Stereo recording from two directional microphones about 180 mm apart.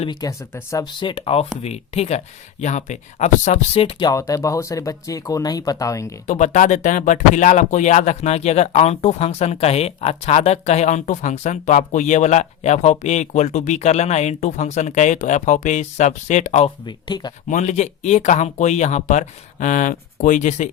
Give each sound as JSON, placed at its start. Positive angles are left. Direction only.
{"t": 0.0, "sound": "speech", "side_deg": 20}
{"t": 4.1, "sound": "speech", "side_deg": 15}
{"t": 6.2, "sound": "speech", "side_deg": 40}
{"t": 16.8, "sound": "speech", "side_deg": 25}
{"t": 17.5, "sound": "speech", "side_deg": 40}